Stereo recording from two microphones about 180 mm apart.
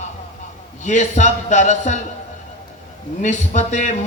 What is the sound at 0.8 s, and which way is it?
A man's voice, 40° left (ahead or behind).